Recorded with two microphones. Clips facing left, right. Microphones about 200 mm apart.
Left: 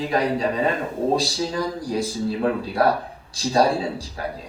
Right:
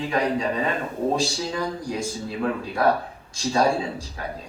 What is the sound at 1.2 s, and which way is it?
Speech, 35° left (ahead or behind).